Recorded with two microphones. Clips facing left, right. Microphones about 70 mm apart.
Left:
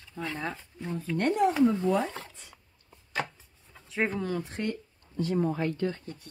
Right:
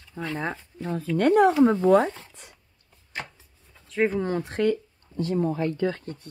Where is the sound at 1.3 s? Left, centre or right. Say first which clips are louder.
Right 6 dB; right.